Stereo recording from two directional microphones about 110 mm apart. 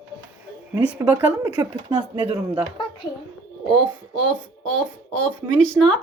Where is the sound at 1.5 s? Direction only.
45° right (ahead or behind).